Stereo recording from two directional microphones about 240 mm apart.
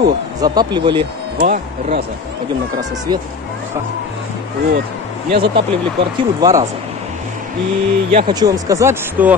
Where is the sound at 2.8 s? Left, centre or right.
Centre.